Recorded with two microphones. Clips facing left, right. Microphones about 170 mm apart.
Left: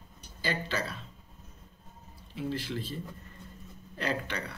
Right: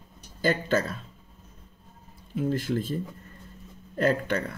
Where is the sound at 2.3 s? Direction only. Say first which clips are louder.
Right 7 dB; 45° right (ahead or behind).